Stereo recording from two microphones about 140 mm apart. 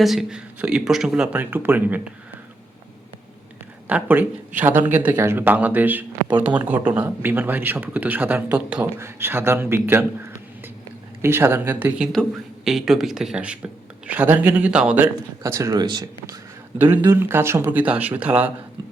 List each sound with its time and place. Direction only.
0.0 s speech: centre (ahead or behind)
3.8 s speech: 10° right (ahead or behind)
11.2 s a man's voice: 15° right (ahead or behind)
16.7 s speech: 15° right (ahead or behind)